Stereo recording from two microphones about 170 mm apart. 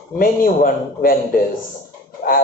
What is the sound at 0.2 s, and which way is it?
A man's voice, 60° left (ahead or behind).